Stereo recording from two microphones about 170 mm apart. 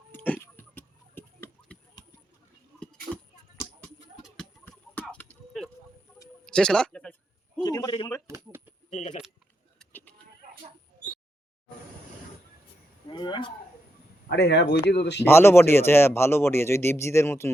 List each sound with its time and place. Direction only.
0.1 s a sound: 15° left (ahead or behind)
4.7 s a sound: 5° left (ahead or behind)
7.6 s a man's voice: 20° left (ahead or behind)
8.3 s typewriter: 15° right (ahead or behind)
8.9 s keys jangling: 45° left (ahead or behind)
13.1 s wild animals: 25° left (ahead or behind)
14.3 s speech: 75° left (ahead or behind)
15.2 s speech: 15° left (ahead or behind)